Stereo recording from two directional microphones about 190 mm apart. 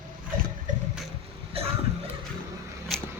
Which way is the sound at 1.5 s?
30° right (ahead or behind).